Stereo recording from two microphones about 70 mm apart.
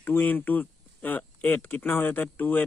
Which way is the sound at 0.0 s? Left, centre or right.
Left.